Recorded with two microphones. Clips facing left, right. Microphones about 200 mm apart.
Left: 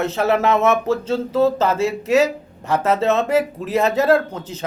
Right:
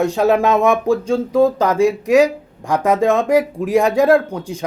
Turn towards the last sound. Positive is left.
turn(degrees=-10)  # may be behind; listen again after turning